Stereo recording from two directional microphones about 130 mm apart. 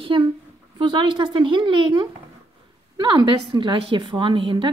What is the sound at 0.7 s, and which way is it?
A woman's voice, 40° right (ahead or behind).